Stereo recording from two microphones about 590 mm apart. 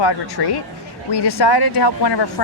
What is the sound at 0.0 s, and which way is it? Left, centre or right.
Speech, left.